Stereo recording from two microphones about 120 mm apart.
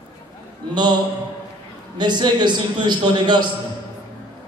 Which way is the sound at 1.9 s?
40° right (ahead or behind).